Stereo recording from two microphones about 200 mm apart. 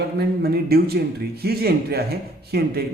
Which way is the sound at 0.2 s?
50° right (ahead or behind).